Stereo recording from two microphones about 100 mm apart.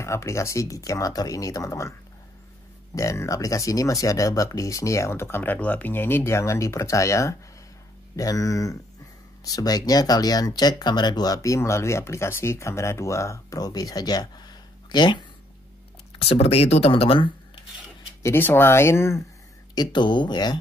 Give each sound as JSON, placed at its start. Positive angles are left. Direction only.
{"t": 0.0, "sound": "speech", "side_deg": 30}
{"t": 16.2, "sound": "speech", "side_deg": 75}
{"t": 18.2, "sound": "speech", "side_deg": 25}
{"t": 19.7, "sound": "speech", "side_deg": 45}